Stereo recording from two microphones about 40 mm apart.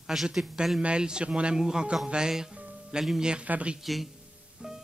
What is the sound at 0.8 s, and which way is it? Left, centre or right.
Speech, right.